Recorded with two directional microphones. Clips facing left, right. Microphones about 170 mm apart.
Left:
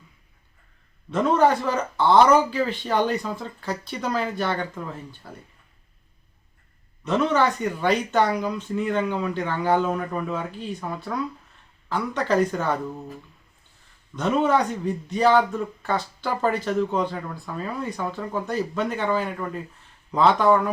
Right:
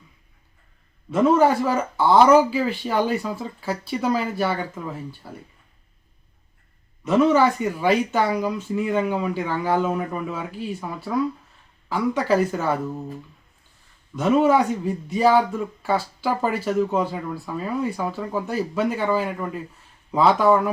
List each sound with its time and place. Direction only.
1.1 s speech: 5° right (ahead or behind)
7.0 s speech: 10° right (ahead or behind)
14.2 s speech: 10° right (ahead or behind)